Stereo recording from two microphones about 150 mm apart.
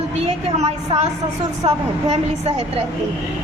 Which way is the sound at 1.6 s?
40° right (ahead or behind).